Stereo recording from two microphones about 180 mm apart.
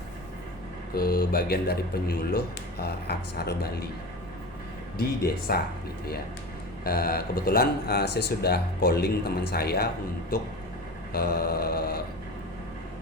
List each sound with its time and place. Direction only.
0.9 s speech: 55° left (ahead or behind)
4.9 s speech: 60° left (ahead or behind)
6.8 s speech: 55° left (ahead or behind)